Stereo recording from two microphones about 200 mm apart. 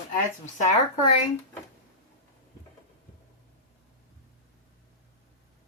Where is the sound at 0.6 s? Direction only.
40° left (ahead or behind).